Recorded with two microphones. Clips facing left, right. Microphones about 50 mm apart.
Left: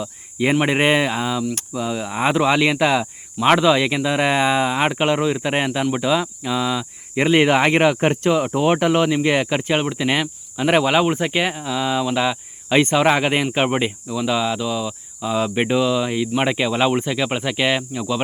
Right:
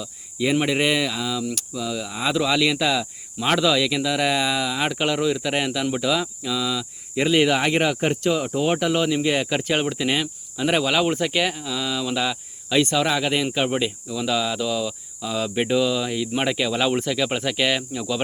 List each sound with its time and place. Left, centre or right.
0.0 s speech: left
9.6 s cricket: left
11.0 s cricket: centre
12.0 s speech: left
14.2 s cricket: centre